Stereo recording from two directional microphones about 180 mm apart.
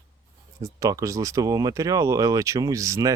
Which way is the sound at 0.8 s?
20° right (ahead or behind).